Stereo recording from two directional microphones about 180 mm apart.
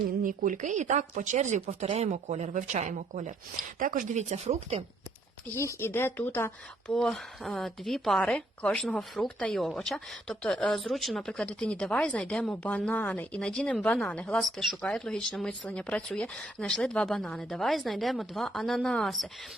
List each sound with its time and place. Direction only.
0.2 s speech: 45° right (ahead or behind)
5.5 s speech: 15° left (ahead or behind)
6.9 s a woman's voice: centre (ahead or behind)